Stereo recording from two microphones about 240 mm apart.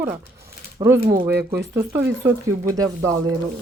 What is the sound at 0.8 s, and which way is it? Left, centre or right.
Speech, right.